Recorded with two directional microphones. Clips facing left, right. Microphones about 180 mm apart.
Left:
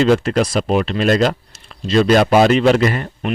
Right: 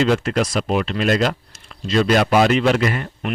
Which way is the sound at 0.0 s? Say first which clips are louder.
Left 4 dB; 35° left (ahead or behind).